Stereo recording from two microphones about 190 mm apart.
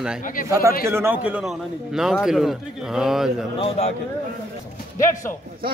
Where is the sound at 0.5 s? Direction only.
15° right (ahead or behind).